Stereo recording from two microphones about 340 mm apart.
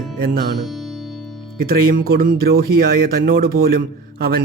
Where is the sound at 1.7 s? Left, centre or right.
Right.